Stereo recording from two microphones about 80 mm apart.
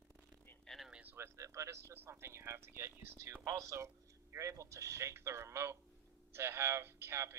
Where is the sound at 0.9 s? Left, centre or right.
Right.